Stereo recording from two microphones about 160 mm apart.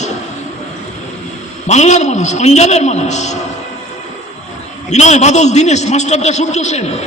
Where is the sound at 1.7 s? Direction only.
45° left (ahead or behind).